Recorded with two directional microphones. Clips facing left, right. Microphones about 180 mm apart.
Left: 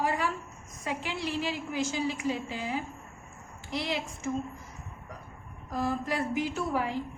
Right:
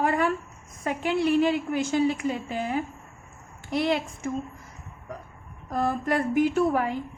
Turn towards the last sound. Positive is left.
turn(degrees=-55)  # may be behind; listen again after turning